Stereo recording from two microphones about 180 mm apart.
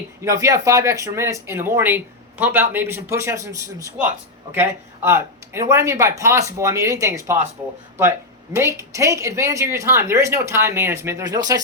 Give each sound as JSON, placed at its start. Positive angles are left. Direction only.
{"t": 0.3, "sound": "speech", "side_deg": -20}
{"t": 5.0, "sound": "speech", "side_deg": -15}
{"t": 8.5, "sound": "speech", "side_deg": -15}